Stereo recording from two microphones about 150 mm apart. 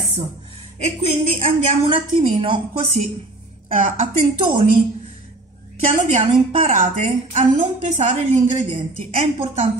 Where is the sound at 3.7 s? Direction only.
65° right (ahead or behind).